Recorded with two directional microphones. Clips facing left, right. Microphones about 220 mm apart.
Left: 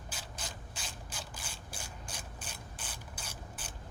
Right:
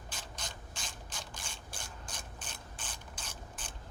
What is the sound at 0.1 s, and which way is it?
Ratchet, 5° left (ahead or behind).